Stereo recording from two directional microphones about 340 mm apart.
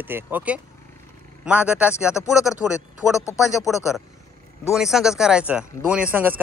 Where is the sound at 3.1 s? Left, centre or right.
Centre.